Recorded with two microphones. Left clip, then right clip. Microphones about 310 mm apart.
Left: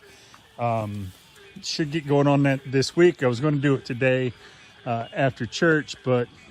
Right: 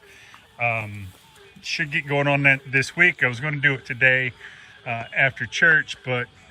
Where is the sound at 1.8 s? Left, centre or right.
Left.